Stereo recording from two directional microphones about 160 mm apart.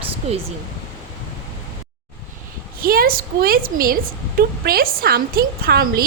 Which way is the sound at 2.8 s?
65° right (ahead or behind).